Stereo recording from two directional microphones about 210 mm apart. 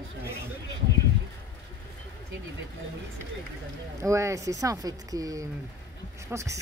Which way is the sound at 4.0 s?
15° right (ahead or behind).